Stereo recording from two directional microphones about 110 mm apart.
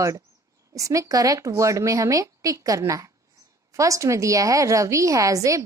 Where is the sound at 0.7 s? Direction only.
30° right (ahead or behind).